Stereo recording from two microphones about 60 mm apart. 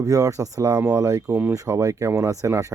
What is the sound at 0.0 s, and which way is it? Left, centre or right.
Speech, right.